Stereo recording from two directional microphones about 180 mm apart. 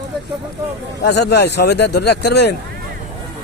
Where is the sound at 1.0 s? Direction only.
70° left (ahead or behind).